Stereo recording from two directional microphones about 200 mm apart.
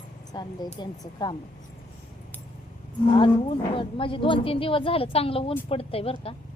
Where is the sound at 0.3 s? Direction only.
20° left (ahead or behind).